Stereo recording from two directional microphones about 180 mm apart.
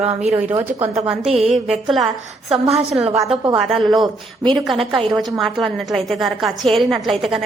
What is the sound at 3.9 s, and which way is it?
Speech, 25° right (ahead or behind).